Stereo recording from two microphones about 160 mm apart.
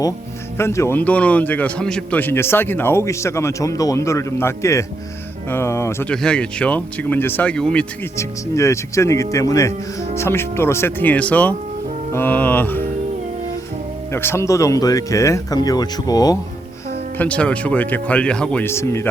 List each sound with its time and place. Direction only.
0.5 s a man's voice: 15° left (ahead or behind)
6.1 s a man's voice: 5° left (ahead or behind)
8.1 s a man's voice: 20° left (ahead or behind)
14.1 s speech: 15° left (ahead or behind)
17.2 s a man's voice: 10° left (ahead or behind)